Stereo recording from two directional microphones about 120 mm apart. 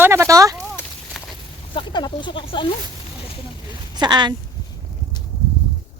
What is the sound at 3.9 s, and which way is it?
Speech, 35° right (ahead or behind).